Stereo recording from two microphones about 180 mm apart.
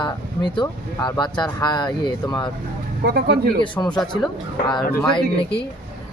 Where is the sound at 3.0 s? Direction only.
60° right (ahead or behind).